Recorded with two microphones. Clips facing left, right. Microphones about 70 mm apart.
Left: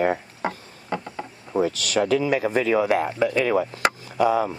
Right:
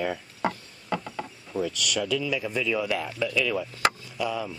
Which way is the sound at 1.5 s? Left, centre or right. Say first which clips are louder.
Left 6 dB; left.